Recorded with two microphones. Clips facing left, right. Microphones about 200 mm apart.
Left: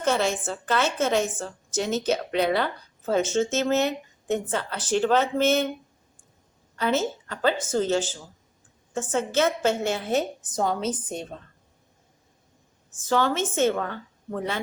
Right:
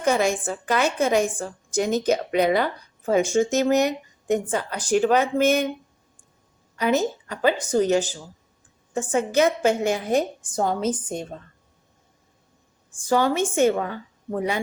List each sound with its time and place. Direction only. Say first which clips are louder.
0.0 s speech: right 3 dB; 15° right (ahead or behind)
6.7 s speech: right 3 dB; 15° right (ahead or behind)
12.9 s speech: right 3 dB; 15° right (ahead or behind)